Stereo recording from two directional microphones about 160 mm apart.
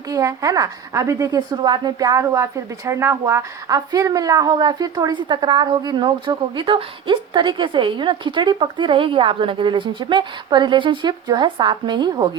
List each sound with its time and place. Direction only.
0.1 s a woman's voice: 20° right (ahead or behind)